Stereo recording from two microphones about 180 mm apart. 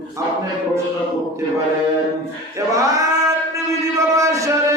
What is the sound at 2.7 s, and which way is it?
Male singing, 20° right (ahead or behind).